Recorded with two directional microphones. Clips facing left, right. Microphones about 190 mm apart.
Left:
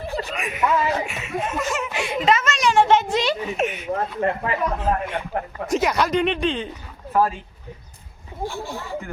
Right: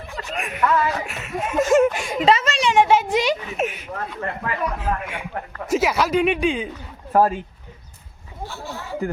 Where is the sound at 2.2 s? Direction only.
30° right (ahead or behind).